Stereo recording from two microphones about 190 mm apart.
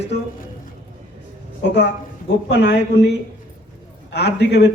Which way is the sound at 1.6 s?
60° left (ahead or behind).